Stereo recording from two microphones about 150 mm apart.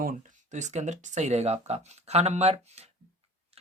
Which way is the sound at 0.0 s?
60° right (ahead or behind).